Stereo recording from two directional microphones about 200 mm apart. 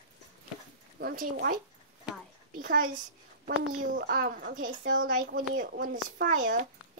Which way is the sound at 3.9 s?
45° right (ahead or behind).